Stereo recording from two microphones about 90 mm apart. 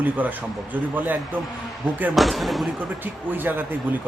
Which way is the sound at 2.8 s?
20° right (ahead or behind).